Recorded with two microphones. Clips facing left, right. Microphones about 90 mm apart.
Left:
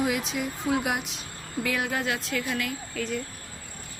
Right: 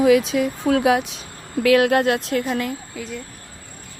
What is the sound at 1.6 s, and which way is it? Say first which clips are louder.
Speech: right 13 dB; 80° right.